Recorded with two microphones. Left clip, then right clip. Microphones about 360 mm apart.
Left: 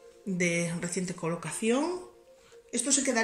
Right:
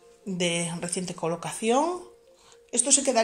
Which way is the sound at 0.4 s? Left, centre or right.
Centre.